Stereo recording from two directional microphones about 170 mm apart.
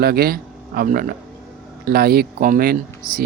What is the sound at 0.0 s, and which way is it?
Speech, 65° right (ahead or behind).